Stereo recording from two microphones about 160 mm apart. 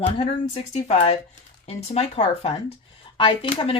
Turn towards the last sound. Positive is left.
turn(degrees=35)  # may be behind; listen again after turning